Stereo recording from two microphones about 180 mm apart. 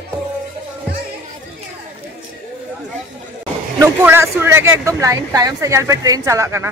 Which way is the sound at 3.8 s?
10° right (ahead or behind).